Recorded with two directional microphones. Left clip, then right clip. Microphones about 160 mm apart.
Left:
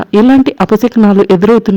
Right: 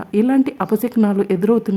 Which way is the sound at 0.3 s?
35° left (ahead or behind).